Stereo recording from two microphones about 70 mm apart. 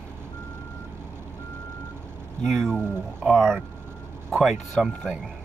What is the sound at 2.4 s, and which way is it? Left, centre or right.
Speech, centre.